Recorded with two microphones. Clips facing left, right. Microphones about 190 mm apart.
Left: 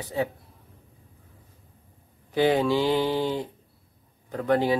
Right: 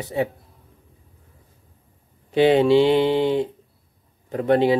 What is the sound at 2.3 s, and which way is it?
Speech, 25° right (ahead or behind).